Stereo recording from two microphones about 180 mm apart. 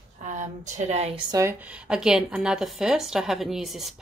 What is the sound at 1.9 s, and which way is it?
A woman's voice, 5° right (ahead or behind).